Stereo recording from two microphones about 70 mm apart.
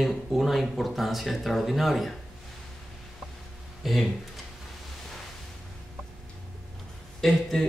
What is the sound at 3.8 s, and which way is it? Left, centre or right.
Speech, centre.